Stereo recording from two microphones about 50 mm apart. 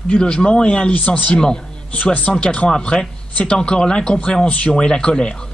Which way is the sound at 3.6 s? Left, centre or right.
Centre.